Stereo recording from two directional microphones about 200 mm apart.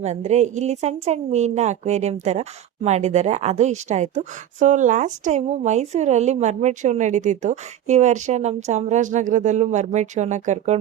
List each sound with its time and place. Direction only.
0.0 s a woman's voice: 35° right (ahead or behind)